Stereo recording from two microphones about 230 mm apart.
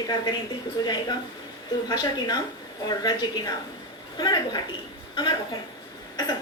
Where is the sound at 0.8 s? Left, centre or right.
Centre.